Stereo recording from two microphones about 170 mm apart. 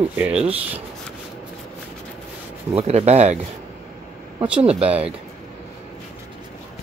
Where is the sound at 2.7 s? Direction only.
40° right (ahead or behind).